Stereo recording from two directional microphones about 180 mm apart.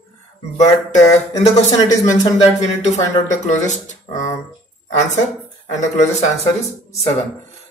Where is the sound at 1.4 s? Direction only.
40° left (ahead or behind).